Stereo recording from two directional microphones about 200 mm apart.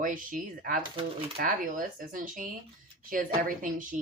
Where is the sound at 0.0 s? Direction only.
40° right (ahead or behind).